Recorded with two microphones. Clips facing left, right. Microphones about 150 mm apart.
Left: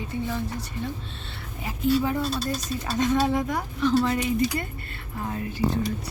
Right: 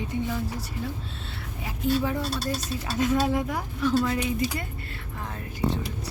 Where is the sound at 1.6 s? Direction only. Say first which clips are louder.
Left 2 dB; centre (ahead or behind).